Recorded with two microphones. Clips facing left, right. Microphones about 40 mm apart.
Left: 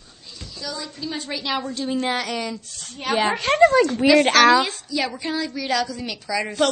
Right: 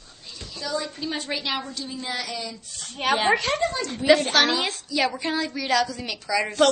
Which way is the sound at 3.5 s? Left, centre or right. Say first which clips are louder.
Left 5 dB; left.